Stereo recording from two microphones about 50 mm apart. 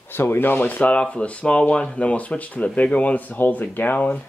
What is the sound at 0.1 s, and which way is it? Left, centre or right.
Speech, left.